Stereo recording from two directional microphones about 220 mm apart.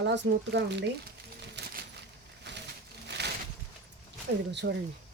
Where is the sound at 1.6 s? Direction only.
50° right (ahead or behind).